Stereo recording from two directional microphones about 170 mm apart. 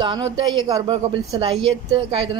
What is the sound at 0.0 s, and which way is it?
Speech, 25° right (ahead or behind).